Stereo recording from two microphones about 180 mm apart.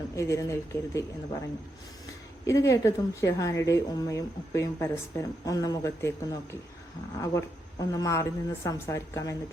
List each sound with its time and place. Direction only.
0.2 s a woman's voice: 15° left (ahead or behind)
2.5 s a woman's voice: 15° left (ahead or behind)